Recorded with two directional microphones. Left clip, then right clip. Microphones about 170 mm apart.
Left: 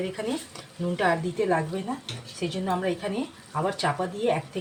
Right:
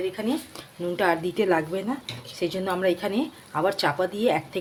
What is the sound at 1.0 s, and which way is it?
Speech, 45° right (ahead or behind).